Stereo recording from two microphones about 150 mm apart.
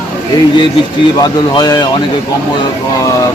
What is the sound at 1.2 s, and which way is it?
Speech, 25° left (ahead or behind).